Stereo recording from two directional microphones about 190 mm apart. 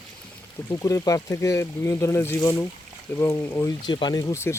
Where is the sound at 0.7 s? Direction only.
15° left (ahead or behind).